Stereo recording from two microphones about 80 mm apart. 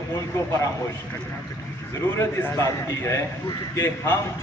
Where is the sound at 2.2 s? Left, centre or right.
Left.